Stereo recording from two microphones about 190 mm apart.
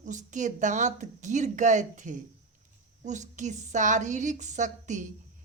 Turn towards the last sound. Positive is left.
turn(degrees=-40)  # may be behind; listen again after turning